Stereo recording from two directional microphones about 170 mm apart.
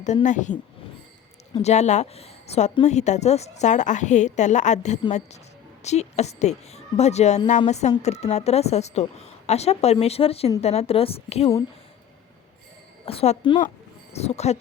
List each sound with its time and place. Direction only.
0.0 s a woman's voice: 45° left (ahead or behind)
1.6 s a woman's voice: 40° left (ahead or behind)
13.1 s a woman's voice: 35° left (ahead or behind)